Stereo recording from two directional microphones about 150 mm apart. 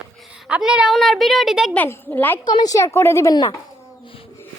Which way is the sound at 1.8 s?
10° left (ahead or behind).